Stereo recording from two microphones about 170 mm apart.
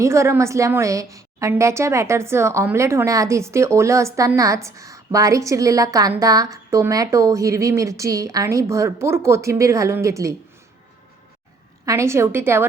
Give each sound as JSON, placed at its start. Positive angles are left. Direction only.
{"t": 0.0, "sound": "a woman's voice", "side_deg": -15}
{"t": 11.9, "sound": "a woman's voice", "side_deg": -15}